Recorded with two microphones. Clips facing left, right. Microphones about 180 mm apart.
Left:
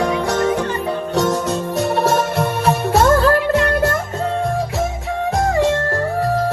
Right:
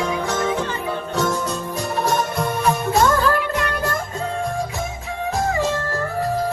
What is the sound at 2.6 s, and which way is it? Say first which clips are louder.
Music: left 2 dB; 70° left (ahead or behind).